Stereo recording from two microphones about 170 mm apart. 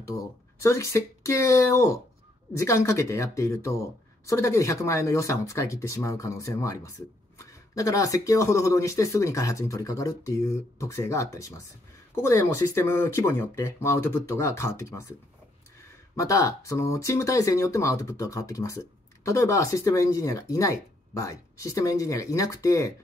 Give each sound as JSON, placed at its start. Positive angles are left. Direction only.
{"t": 0.6, "sound": "speech", "side_deg": 15}
{"t": 16.2, "sound": "speech", "side_deg": 20}